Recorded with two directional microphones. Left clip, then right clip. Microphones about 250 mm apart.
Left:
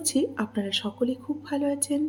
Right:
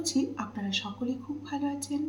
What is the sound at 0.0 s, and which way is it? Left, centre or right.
A woman's voice, left.